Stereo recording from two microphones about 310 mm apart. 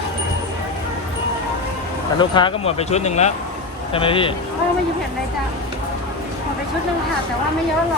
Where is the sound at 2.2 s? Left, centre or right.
Centre.